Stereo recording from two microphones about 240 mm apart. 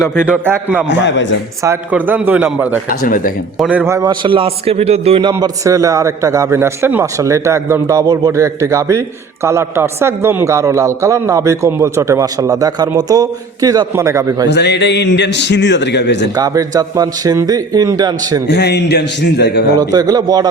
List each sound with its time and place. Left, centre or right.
0.3 s a man's voice: centre
0.9 s a man's voice: left
1.6 s a man's voice: centre
3.0 s speech: left
3.6 s a man's voice: centre
14.5 s a man's voice: left
16.3 s a man's voice: centre
18.4 s a man's voice: left
19.8 s a man's voice: centre